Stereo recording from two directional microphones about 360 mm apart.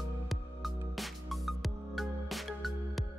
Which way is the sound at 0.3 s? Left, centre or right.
Centre.